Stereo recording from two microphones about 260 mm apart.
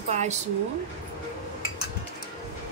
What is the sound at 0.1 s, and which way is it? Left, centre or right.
Speech, right.